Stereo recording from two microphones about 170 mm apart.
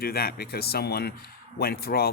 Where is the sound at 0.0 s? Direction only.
65° left (ahead or behind).